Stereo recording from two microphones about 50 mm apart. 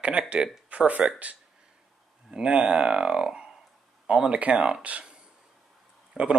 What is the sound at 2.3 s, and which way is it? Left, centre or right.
Speech, centre.